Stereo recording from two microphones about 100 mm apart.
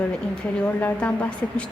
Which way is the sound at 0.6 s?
15° left (ahead or behind).